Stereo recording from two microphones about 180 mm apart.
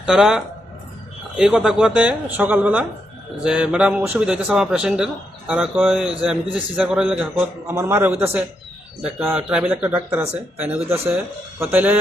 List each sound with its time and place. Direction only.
0.0 s a man's voice: 5° right (ahead or behind)
10.8 s speech: 35° right (ahead or behind)
11.6 s speech: 10° right (ahead or behind)